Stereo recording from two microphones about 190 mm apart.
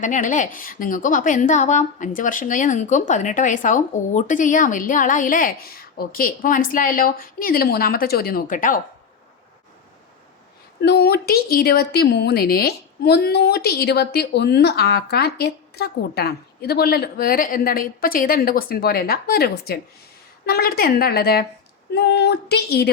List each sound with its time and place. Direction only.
0.0 s a woman's voice: 40° left (ahead or behind)
10.8 s a woman's voice: 55° left (ahead or behind)